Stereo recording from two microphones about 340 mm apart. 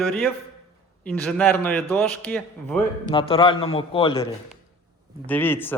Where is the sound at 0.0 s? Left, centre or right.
Centre.